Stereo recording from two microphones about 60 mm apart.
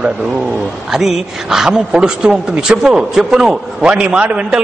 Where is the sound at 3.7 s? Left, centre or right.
Centre.